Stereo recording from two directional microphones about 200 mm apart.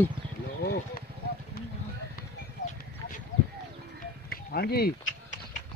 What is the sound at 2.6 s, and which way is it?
Clip-clop, 60° left (ahead or behind).